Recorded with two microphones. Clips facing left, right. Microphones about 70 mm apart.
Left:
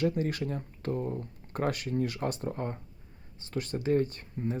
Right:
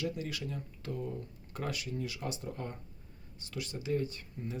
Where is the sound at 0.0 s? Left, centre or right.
Left.